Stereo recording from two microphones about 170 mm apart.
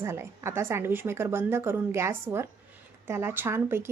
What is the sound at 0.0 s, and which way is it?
Speech, 15° right (ahead or behind).